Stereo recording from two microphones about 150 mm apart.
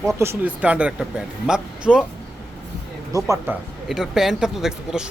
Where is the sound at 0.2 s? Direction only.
15° right (ahead or behind).